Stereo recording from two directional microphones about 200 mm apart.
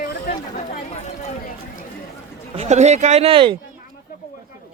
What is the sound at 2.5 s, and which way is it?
Speech, 35° right (ahead or behind).